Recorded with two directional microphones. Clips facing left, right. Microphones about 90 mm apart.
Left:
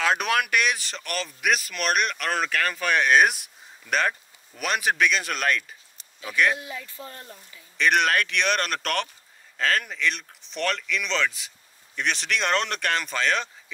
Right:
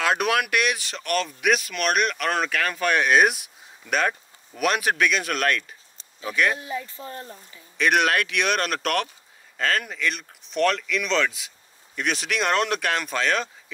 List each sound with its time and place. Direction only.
0.0 s speech: centre (ahead or behind)
6.6 s speech: 30° right (ahead or behind)
7.7 s speech: 5° right (ahead or behind)